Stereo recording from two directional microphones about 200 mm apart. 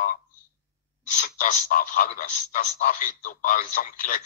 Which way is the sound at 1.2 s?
40° left (ahead or behind).